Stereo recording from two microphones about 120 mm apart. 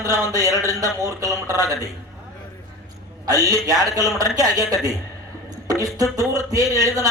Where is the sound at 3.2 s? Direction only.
30° right (ahead or behind).